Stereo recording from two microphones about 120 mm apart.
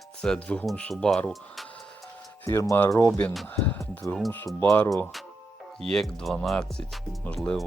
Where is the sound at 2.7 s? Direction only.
20° left (ahead or behind).